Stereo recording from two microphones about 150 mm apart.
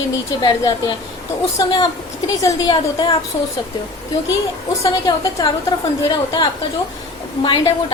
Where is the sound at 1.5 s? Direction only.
25° left (ahead or behind).